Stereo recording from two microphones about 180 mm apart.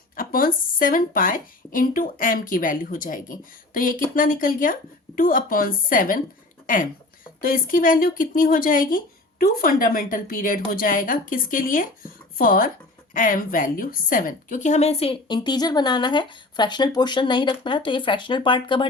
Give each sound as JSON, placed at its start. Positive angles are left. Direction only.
{"t": 0.2, "sound": "speech", "side_deg": 50}
{"t": 7.4, "sound": "a woman's voice", "side_deg": 50}